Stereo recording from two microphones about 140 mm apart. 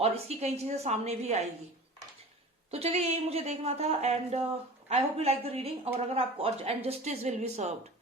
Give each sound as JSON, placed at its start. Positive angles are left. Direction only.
{"t": 0.0, "sound": "speech", "side_deg": -50}
{"t": 2.6, "sound": "speech", "side_deg": -50}